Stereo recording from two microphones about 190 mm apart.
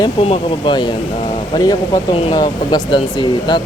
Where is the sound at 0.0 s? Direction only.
30° left (ahead or behind).